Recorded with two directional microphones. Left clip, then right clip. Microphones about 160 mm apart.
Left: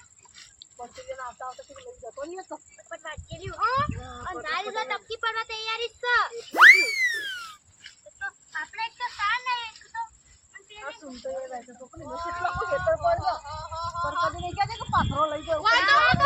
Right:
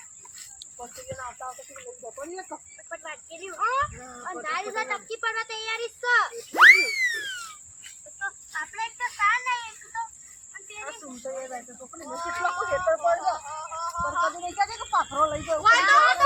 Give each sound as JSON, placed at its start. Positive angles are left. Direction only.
{"t": 0.8, "sound": "speech", "side_deg": 15}
{"t": 4.7, "sound": "speech", "side_deg": -10}
{"t": 5.2, "sound": "speech", "side_deg": 10}
{"t": 6.5, "sound": "speech", "side_deg": 0}
{"t": 8.2, "sound": "a sound", "side_deg": 15}
{"t": 10.8, "sound": "speech", "side_deg": 20}
{"t": 15.6, "sound": "a child's voice", "side_deg": 25}